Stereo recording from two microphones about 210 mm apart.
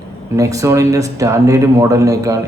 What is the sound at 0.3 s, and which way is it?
Speech, 15° right (ahead or behind).